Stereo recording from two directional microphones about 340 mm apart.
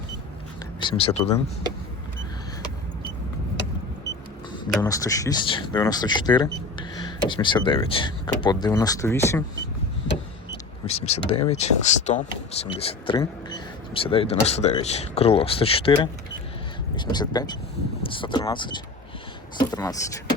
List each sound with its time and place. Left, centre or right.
0.8 s speech: centre
4.7 s speech: centre
10.8 s speech: centre
17.0 s speech: centre